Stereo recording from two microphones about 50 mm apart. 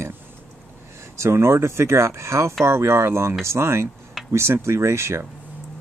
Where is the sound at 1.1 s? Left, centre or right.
Right.